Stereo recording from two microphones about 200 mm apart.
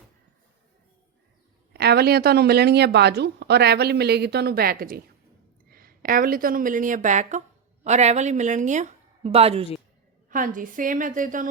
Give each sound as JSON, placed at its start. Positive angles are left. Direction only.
{"t": 1.7, "sound": "a woman's voice", "side_deg": -55}
{"t": 10.2, "sound": "a woman's voice", "side_deg": -45}